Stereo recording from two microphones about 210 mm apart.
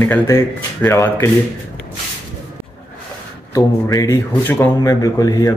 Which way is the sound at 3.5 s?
15° left (ahead or behind).